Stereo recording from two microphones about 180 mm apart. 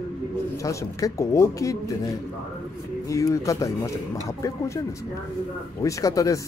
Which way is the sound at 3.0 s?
15° left (ahead or behind).